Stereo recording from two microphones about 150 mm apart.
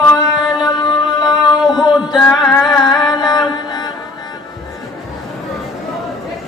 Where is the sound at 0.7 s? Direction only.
30° left (ahead or behind).